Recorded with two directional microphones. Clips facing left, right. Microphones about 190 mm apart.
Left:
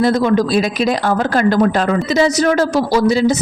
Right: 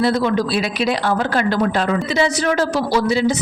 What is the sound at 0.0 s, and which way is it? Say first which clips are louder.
Speech: left 4 dB; 45° left (ahead or behind).